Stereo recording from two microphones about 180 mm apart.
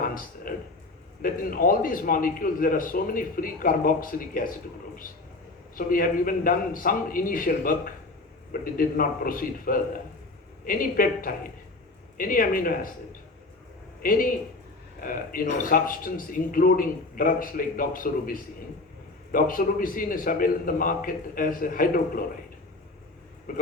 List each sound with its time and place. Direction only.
0.0 s a sound: 50° left (ahead or behind)
1.2 s a man's voice: 50° left (ahead or behind)
5.7 s a man's voice: 50° left (ahead or behind)
14.0 s a man's voice: 50° left (ahead or behind)
23.5 s a man's voice: 50° left (ahead or behind)